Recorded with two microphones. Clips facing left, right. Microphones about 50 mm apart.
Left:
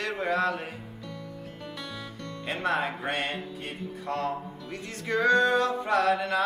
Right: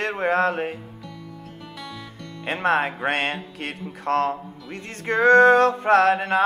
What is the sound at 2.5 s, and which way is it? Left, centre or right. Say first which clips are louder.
Music: right 7 dB; right.